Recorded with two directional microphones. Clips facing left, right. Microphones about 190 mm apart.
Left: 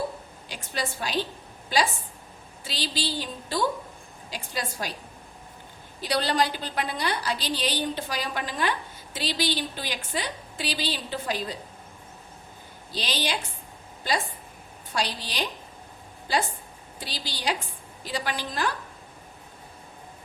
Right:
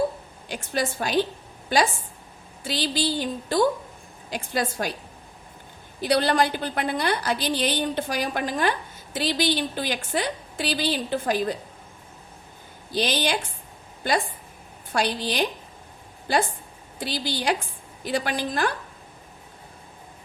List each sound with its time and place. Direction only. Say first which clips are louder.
0.4 s a woman's voice: right 6 dB; 50° right (ahead or behind)
2.6 s a woman's voice: right 6 dB; 50° right (ahead or behind)
6.0 s a woman's voice: right 4 dB; 50° right (ahead or behind)
12.9 s a woman's voice: right 6 dB; 50° right (ahead or behind)
14.9 s a woman's voice: right 6 dB; 50° right (ahead or behind)
17.0 s a woman's voice: right 7 dB; 55° right (ahead or behind)